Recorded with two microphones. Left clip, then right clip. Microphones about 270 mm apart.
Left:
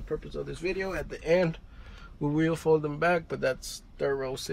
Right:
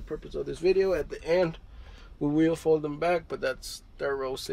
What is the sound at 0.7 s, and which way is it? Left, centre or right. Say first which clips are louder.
Speech: right 9 dB; centre.